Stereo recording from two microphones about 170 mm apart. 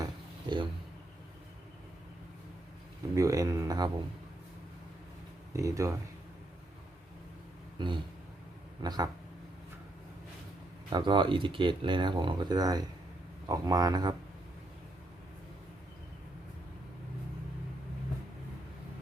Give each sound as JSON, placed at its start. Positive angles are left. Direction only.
{"t": 0.0, "sound": "dishes", "side_deg": -25}
{"t": 3.2, "sound": "speech", "side_deg": -20}
{"t": 5.5, "sound": "speech", "side_deg": -20}
{"t": 7.8, "sound": "speech", "side_deg": -25}
{"t": 10.8, "sound": "speech", "side_deg": -25}